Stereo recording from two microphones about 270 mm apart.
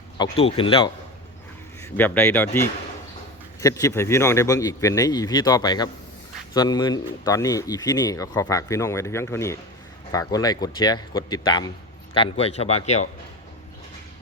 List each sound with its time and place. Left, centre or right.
0.2 s speech: left
1.8 s speech: centre; by 13.1 s left